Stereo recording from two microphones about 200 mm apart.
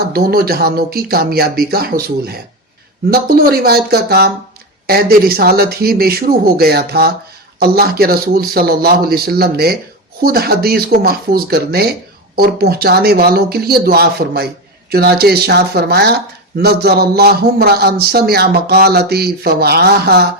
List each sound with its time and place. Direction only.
0.1 s speech: 50° right (ahead or behind)